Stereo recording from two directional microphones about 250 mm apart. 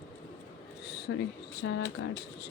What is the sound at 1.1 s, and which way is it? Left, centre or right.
Speech, left.